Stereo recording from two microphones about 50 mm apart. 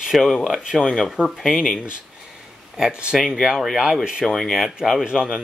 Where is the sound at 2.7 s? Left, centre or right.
Centre.